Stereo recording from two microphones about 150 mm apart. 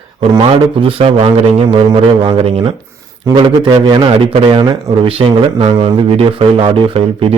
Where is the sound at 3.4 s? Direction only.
30° right (ahead or behind).